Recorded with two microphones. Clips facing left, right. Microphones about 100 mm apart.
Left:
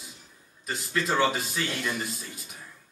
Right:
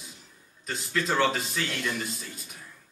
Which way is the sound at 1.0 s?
10° left (ahead or behind).